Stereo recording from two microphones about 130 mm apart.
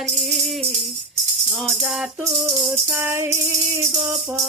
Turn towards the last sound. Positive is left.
turn(degrees=-20)  # may be behind; listen again after turning